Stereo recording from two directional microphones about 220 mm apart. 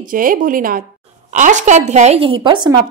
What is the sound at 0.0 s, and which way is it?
A woman's voice, 40° right (ahead or behind).